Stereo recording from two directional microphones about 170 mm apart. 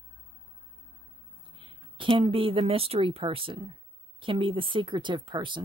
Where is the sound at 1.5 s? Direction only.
30° right (ahead or behind).